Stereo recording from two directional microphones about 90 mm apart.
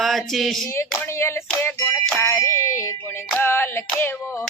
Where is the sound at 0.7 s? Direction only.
30° left (ahead or behind).